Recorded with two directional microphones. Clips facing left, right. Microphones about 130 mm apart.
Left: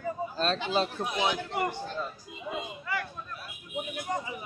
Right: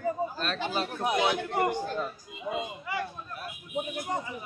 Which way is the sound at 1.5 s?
50° right (ahead or behind).